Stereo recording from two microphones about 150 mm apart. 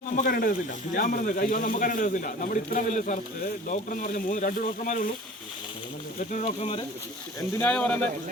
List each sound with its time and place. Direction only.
0.3 s a man's voice: 75° left (ahead or behind)
6.1 s speech: 55° left (ahead or behind)
7.6 s speech: 10° left (ahead or behind)